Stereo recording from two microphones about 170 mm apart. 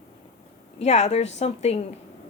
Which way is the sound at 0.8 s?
40° left (ahead or behind).